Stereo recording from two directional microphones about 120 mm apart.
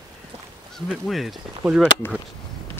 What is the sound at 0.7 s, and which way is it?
Speech, centre (ahead or behind).